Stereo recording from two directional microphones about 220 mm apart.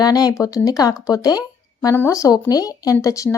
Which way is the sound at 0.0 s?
15° left (ahead or behind).